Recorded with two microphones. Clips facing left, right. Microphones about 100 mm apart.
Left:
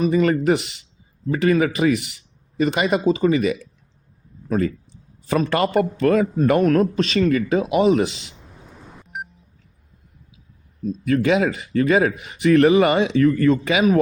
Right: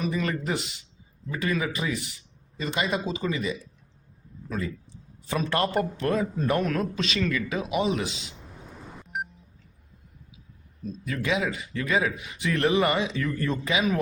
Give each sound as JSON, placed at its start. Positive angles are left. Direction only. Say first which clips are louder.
{"t": 0.1, "sound": "a man's voice", "louder": "left 11 dB", "side_deg": 65}
{"t": 4.4, "sound": "speech", "louder": "left 10 dB", "side_deg": 55}
{"t": 5.3, "sound": "a man's voice", "louder": "left 7 dB", "side_deg": 70}
{"t": 8.2, "sound": "vehicle", "louder": "even", "side_deg": 0}
{"t": 11.0, "sound": "speech", "louder": "left 9 dB", "side_deg": 60}